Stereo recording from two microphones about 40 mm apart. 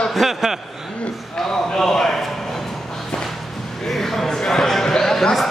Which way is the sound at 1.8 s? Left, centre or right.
Centre.